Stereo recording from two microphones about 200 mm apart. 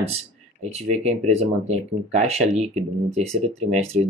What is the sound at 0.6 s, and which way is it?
Speech, 30° right (ahead or behind).